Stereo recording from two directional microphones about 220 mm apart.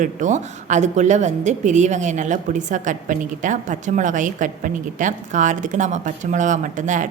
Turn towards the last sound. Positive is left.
turn(degrees=-35)  # may be behind; listen again after turning